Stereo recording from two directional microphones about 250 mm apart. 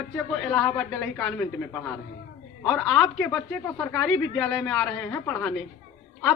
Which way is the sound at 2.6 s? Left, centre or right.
Centre.